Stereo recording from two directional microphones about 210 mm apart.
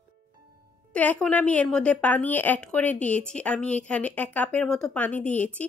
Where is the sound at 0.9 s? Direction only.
5° left (ahead or behind).